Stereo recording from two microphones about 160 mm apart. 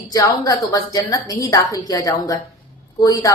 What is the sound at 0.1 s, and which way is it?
A woman's voice, 20° left (ahead or behind).